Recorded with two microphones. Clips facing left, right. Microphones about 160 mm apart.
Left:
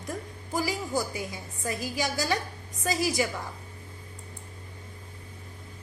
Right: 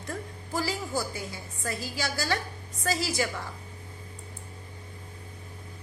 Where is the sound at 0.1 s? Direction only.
15° left (ahead or behind).